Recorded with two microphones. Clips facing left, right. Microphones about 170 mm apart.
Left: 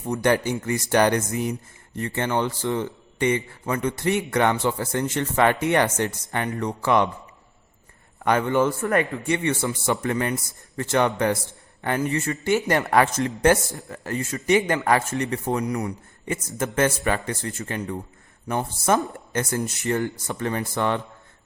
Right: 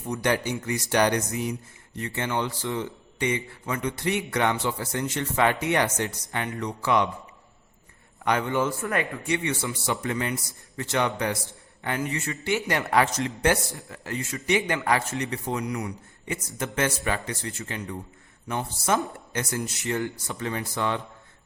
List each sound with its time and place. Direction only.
0.1 s a man's voice: 50° left (ahead or behind)
8.2 s a man's voice: 50° left (ahead or behind)